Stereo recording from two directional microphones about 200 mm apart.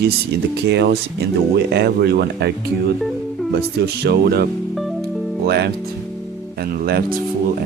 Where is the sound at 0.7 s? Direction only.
60° right (ahead or behind).